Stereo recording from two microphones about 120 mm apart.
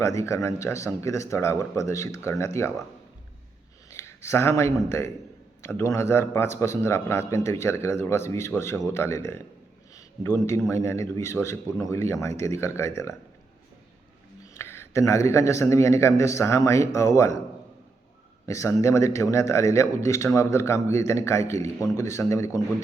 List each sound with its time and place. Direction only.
0.0 s a man's voice: 25° left (ahead or behind)
3.8 s a man's voice: 20° left (ahead or behind)
9.9 s a sound: 20° left (ahead or behind)
10.7 s a man's voice: 25° left (ahead or behind)
14.5 s a man's voice: 20° left (ahead or behind)
18.4 s a man's voice: 25° left (ahead or behind)